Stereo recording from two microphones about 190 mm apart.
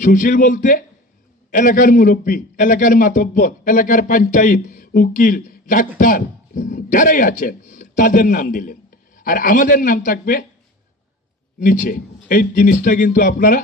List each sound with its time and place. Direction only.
0.0 s a man's voice: 45° left (ahead or behind)
11.6 s a man's voice: 45° left (ahead or behind)